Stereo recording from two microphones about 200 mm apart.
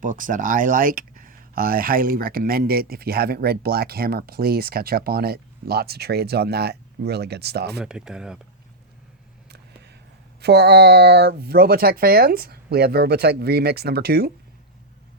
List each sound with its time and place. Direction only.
0.0 s speech: 40° right (ahead or behind)
7.8 s speech: 5° right (ahead or behind)
9.5 s a sound: 55° right (ahead or behind)
10.4 s speech: 55° right (ahead or behind)